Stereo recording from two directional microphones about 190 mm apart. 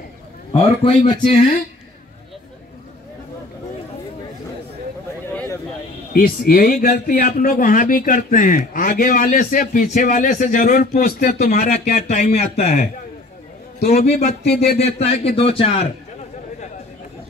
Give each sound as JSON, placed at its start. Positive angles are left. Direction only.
{"t": 0.5, "sound": "speech", "side_deg": 30}
{"t": 1.2, "sound": "speech", "side_deg": 45}
{"t": 5.2, "sound": "a sound", "side_deg": 10}
{"t": 6.1, "sound": "a man's voice", "side_deg": 50}